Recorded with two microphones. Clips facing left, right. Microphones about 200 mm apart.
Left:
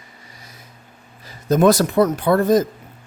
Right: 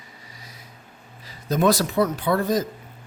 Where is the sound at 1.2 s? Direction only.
45° left (ahead or behind).